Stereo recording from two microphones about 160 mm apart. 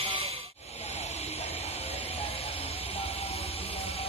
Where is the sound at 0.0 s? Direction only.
35° right (ahead or behind).